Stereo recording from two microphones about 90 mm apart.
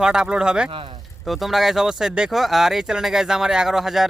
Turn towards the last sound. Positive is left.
turn(degrees=-5)  # may be behind; listen again after turning